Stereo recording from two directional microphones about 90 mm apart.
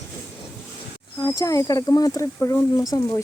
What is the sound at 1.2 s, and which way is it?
Speech, 40° left (ahead or behind).